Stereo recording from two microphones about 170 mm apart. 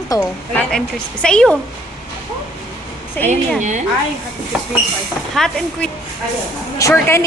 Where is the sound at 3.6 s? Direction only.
45° right (ahead or behind).